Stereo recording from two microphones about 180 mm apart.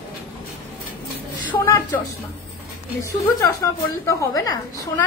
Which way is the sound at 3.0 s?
15° left (ahead or behind).